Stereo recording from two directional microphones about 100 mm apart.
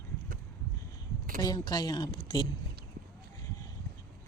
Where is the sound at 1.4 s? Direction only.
40° left (ahead or behind).